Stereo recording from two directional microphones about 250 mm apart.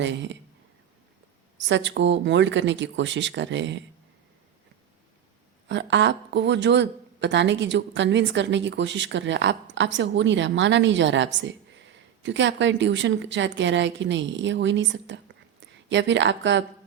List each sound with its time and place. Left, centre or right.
0.0 s speech: right
1.5 s speech: right
5.6 s speech: right